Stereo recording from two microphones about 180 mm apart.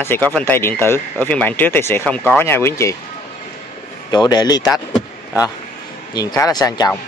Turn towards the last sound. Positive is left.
turn(degrees=20)  # may be behind; listen again after turning